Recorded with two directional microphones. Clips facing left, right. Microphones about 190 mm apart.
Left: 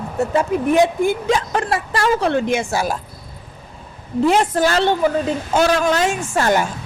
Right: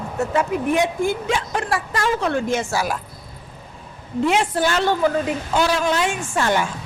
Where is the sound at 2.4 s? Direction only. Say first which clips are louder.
Left 3 dB; 20° left (ahead or behind).